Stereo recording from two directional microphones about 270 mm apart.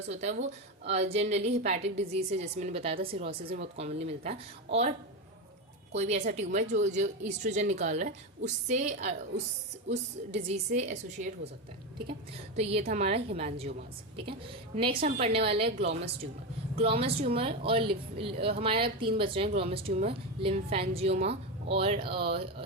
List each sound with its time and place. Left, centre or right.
0.1 s a woman's voice: right
5.9 s a woman's voice: right
10.3 s a woman's voice: right
12.8 s a woman's voice: right
14.8 s a woman's voice: right